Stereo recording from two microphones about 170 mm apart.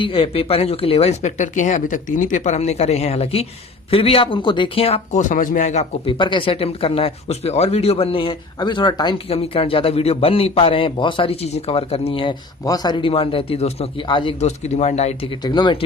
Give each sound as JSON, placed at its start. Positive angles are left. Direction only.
{"t": 0.0, "sound": "speech", "side_deg": 30}
{"t": 6.1, "sound": "speech", "side_deg": 30}